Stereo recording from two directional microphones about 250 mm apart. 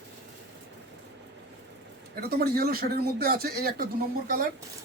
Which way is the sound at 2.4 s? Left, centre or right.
Right.